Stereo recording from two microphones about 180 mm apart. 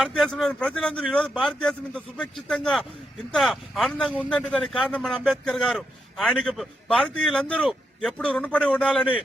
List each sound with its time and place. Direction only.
0.0 s a man's voice: 5° left (ahead or behind)